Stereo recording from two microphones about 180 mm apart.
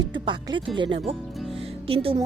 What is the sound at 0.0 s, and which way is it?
Speech, 25° right (ahead or behind).